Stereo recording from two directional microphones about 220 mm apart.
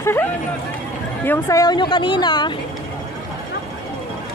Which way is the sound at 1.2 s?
10° left (ahead or behind).